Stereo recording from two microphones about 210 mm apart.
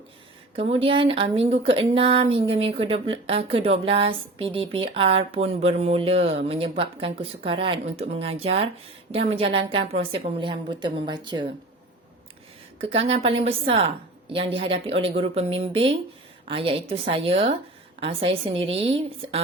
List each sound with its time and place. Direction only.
0.5 s speech: 25° right (ahead or behind)
12.8 s speech: 25° right (ahead or behind)